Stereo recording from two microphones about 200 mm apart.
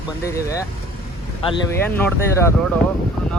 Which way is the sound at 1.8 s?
10° left (ahead or behind).